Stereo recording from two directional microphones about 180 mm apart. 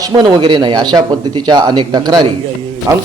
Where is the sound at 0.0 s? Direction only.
20° right (ahead or behind).